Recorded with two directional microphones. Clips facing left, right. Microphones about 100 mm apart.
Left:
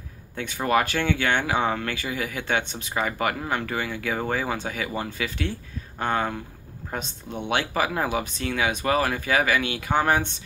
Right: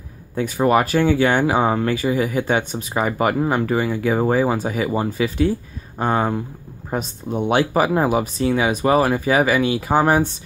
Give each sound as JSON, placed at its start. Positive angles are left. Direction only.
{"t": 0.4, "sound": "speech", "side_deg": -30}
{"t": 1.6, "sound": "speech", "side_deg": -20}
{"t": 7.2, "sound": "speech", "side_deg": -45}
{"t": 7.5, "sound": "speech", "side_deg": -25}
{"t": 9.6, "sound": "speech", "side_deg": -35}